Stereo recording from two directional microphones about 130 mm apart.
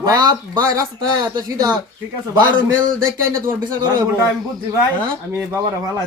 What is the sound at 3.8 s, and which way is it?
Speech, 35° right (ahead or behind).